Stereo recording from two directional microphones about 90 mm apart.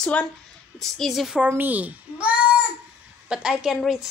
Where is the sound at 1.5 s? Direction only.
20° right (ahead or behind).